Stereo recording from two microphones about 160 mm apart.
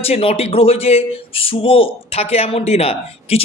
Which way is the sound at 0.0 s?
35° left (ahead or behind).